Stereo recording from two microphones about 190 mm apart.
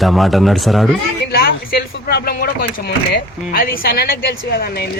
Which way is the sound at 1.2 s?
55° left (ahead or behind).